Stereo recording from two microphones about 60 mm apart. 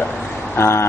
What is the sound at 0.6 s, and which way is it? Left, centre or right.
Speech, left.